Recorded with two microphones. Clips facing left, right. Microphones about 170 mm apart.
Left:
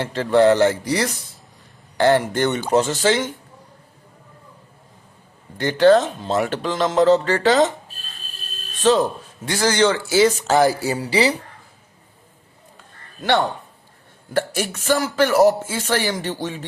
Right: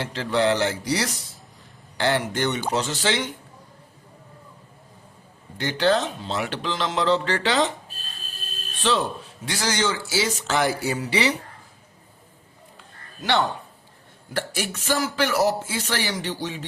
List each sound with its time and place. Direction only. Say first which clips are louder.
0.0 s speech: left 7 dB; 50° left (ahead or behind)
5.5 s speech: left 8 dB; 50° left (ahead or behind)
8.8 s speech: left 7 dB; 45° left (ahead or behind)
10.4 s speech: left 6 dB; 40° left (ahead or behind)
14.3 s speech: left 6 dB; 50° left (ahead or behind)